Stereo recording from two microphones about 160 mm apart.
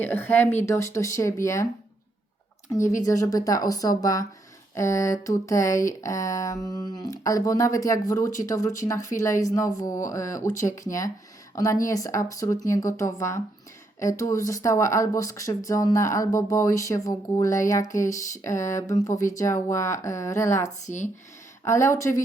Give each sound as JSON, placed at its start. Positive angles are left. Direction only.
{"t": 0.0, "sound": "speech", "side_deg": 10}
{"t": 2.7, "sound": "speech", "side_deg": 20}
{"t": 10.4, "sound": "speech", "side_deg": 50}
{"t": 10.8, "sound": "speech", "side_deg": 20}
{"t": 20.6, "sound": "speech", "side_deg": 45}
{"t": 21.6, "sound": "speech", "side_deg": 20}